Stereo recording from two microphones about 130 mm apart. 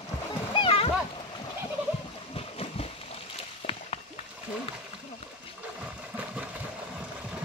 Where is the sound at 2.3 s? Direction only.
50° left (ahead or behind).